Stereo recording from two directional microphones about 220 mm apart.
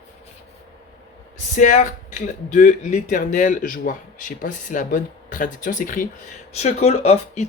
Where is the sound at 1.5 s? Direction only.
35° left (ahead or behind).